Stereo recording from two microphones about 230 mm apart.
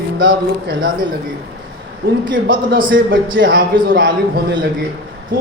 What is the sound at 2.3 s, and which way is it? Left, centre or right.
A man's voice, right.